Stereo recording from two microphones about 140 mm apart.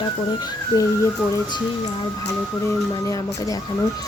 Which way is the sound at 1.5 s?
30° left (ahead or behind).